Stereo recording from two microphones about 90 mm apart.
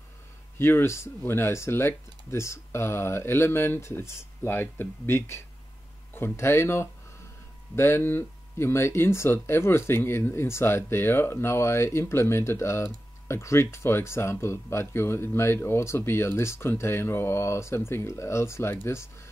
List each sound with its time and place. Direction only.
0.6 s speech: 25° left (ahead or behind)